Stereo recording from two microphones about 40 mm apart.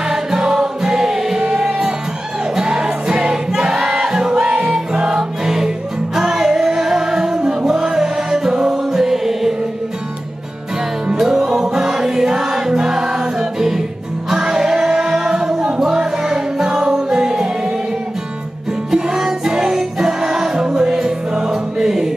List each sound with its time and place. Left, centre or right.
0.1 s music: centre
11.1 s music: centre
18.9 s music: centre